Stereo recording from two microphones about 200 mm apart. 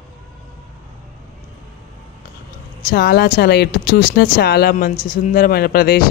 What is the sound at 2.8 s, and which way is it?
Speech, 50° left (ahead or behind).